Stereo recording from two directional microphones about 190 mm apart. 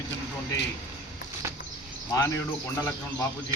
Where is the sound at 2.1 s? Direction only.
15° left (ahead or behind).